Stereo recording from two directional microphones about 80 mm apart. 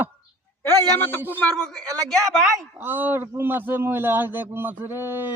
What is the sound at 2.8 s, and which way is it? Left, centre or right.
A man's voice, right.